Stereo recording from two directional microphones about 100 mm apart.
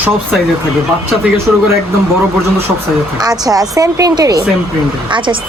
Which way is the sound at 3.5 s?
35° right (ahead or behind).